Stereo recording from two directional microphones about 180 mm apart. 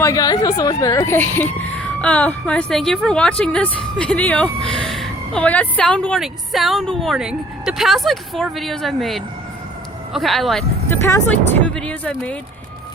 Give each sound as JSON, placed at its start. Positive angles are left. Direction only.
{"t": 0.0, "sound": "speech", "side_deg": 20}
{"t": 10.8, "sound": "speech", "side_deg": 15}